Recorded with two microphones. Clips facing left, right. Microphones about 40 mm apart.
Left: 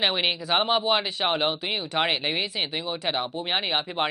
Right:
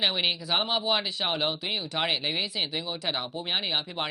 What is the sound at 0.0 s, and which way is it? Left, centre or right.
Speech, centre.